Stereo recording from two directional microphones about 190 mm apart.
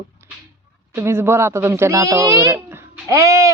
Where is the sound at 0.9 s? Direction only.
15° right (ahead or behind).